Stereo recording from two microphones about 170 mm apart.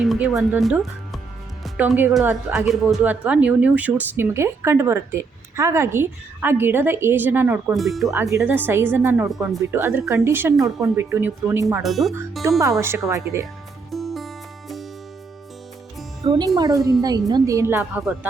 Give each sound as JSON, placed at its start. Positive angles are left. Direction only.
{"t": 0.0, "sound": "speech", "side_deg": 0}
{"t": 7.7, "sound": "speech", "side_deg": 0}
{"t": 8.1, "sound": "speech", "side_deg": -20}
{"t": 9.2, "sound": "speech", "side_deg": 0}
{"t": 9.7, "sound": "speech", "side_deg": -15}
{"t": 11.8, "sound": "speech", "side_deg": 0}
{"t": 12.4, "sound": "a woman's voice", "side_deg": -20}
{"t": 13.9, "sound": "music", "side_deg": 0}
{"t": 16.2, "sound": "speech", "side_deg": -30}
{"t": 16.6, "sound": "a woman's voice", "side_deg": -20}